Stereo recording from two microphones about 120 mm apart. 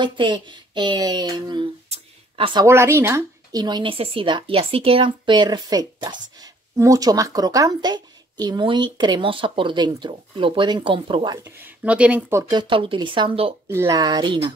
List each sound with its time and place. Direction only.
0.0 s speech: 40° right (ahead or behind)
1.9 s a sound: 50° right (ahead or behind)
2.6 s speech: 20° right (ahead or behind)
3.6 s speech: 40° right (ahead or behind)
4.0 s speech: 50° right (ahead or behind)
11.4 s speech: 15° right (ahead or behind)
12.4 s speech: 35° right (ahead or behind)
13.7 s speech: 25° right (ahead or behind)